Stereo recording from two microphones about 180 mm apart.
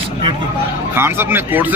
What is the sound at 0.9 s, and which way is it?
Speech, 10° right (ahead or behind).